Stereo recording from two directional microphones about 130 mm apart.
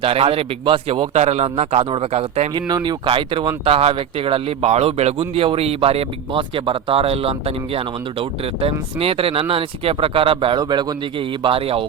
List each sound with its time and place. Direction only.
0.0 s speech: 45° right (ahead or behind)
1.1 s a man's voice: 60° right (ahead or behind)
2.6 s speech: 35° right (ahead or behind)